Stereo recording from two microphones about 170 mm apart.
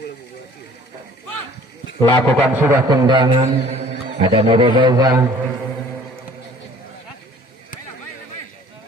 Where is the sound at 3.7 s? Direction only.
40° right (ahead or behind); by 5.2 s 20° right (ahead or behind).